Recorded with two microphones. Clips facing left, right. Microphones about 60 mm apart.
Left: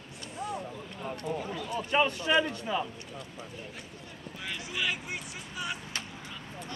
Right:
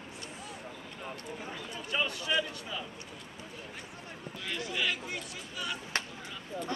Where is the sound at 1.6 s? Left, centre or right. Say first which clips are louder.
Left 7 dB; left.